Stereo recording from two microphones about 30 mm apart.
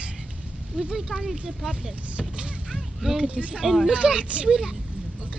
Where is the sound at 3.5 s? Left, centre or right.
Centre.